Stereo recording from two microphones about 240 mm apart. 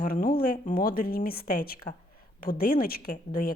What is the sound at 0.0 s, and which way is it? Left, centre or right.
A woman's voice, left.